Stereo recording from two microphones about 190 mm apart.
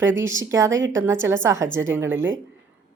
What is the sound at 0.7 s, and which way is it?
Speech, 75° right (ahead or behind).